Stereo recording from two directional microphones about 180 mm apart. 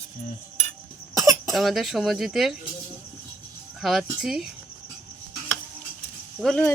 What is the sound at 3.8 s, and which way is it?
Speech, centre (ahead or behind).